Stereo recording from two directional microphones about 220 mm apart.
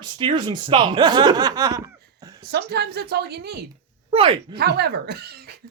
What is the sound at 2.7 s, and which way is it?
Speech, 45° right (ahead or behind).